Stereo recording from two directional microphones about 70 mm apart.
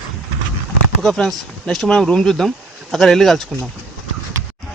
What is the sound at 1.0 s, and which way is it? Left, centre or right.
A man's voice, centre.